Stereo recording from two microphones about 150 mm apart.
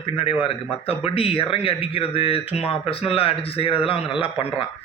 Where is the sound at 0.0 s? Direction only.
40° left (ahead or behind).